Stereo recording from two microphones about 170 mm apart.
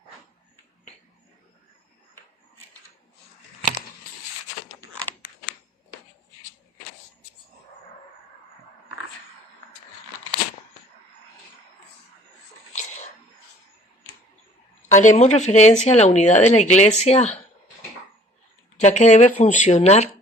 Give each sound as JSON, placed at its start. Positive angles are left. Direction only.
{"t": 14.9, "sound": "a woman's voice", "side_deg": 45}
{"t": 18.8, "sound": "a woman's voice", "side_deg": 40}